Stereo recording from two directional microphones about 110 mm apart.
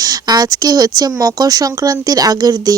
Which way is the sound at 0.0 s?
35° right (ahead or behind).